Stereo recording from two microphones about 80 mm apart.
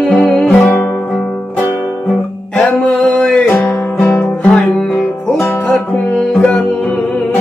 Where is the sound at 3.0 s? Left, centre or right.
Centre.